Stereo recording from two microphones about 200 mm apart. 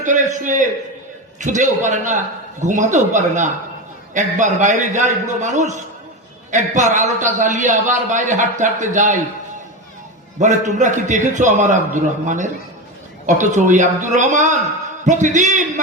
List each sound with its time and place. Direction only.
0.0 s a man's voice: 40° right (ahead or behind)
10.4 s a man's voice: 35° right (ahead or behind)